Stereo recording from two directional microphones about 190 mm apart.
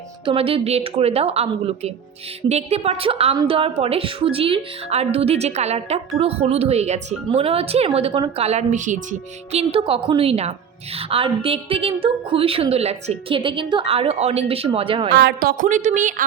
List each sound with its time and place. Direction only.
0.3 s a woman's voice: 30° right (ahead or behind)
15.1 s a woman's voice: 60° right (ahead or behind)
15.6 s a woman's voice: 40° right (ahead or behind)